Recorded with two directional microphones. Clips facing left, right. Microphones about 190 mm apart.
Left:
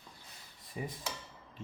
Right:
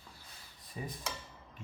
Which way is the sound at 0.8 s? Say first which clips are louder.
Left 2 dB; 15° left (ahead or behind).